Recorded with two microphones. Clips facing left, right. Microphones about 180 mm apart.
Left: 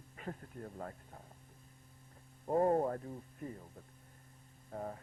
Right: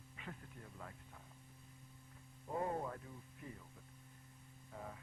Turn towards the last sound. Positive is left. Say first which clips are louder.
# left 8 dB
turn(degrees=45)  # may be behind; listen again after turning